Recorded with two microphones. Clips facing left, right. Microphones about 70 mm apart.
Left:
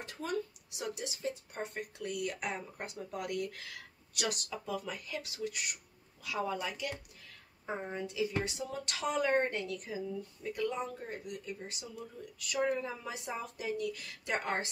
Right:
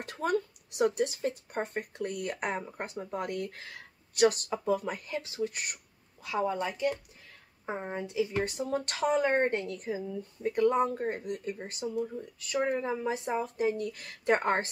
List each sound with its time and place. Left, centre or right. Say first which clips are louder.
0.0 s a woman's voice: right 7 dB; right
8.5 s speech: right 7 dB; right